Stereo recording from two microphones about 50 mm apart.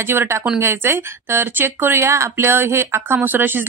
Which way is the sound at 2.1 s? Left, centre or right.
Right.